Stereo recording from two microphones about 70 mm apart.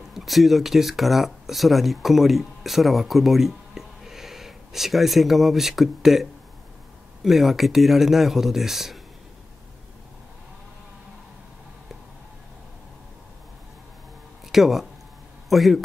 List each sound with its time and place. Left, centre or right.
0.1 s speech: centre
7.2 s speech: centre
14.5 s speech: centre